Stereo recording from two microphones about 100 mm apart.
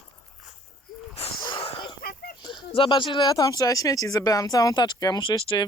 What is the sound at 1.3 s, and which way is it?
Sneeze, 50° left (ahead or behind).